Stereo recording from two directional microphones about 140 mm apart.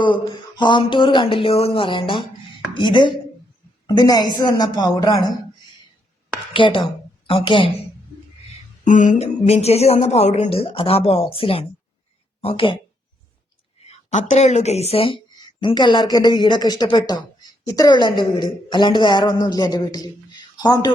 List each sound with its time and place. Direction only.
0.0 s a man's voice: 35° left (ahead or behind)
6.5 s a woman's voice: 35° left (ahead or behind)
8.8 s speech: 65° left (ahead or behind); by 12.7 s 40° left (ahead or behind)
13.8 s a woman's voice: 60° left (ahead or behind); by 20.9 s 30° left (ahead or behind)